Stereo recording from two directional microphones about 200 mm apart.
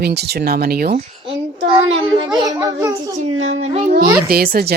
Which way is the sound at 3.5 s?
35° right (ahead or behind).